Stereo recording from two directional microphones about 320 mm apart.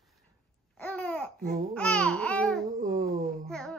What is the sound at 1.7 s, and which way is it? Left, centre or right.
Speech, centre.